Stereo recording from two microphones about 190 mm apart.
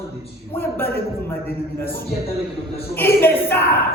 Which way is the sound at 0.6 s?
10° left (ahead or behind).